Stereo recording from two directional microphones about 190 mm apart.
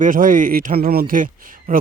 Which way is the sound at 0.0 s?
45° right (ahead or behind).